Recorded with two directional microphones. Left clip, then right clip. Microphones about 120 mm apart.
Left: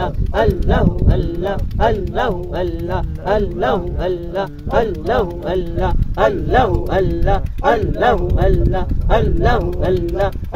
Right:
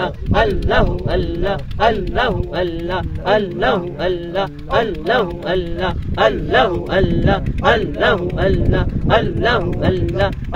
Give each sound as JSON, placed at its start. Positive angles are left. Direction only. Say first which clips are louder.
{"t": 0.3, "sound": "speech", "louder": "right 1 dB", "side_deg": -45}
{"t": 6.1, "sound": "speech", "louder": "right 1 dB", "side_deg": -10}